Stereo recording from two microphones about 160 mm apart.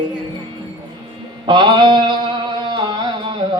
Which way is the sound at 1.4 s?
30° right (ahead or behind).